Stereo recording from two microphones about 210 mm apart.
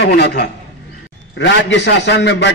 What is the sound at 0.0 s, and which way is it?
A man's voice, 50° left (ahead or behind).